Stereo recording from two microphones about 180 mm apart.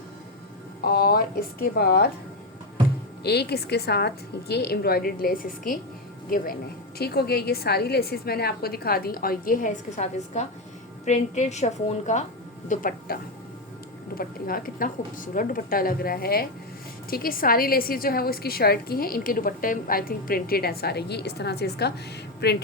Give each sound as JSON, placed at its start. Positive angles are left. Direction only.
{"t": 0.9, "sound": "a woman's voice", "side_deg": 55}
{"t": 3.2, "sound": "a woman's voice", "side_deg": 65}
{"t": 14.2, "sound": "a woman's voice", "side_deg": 50}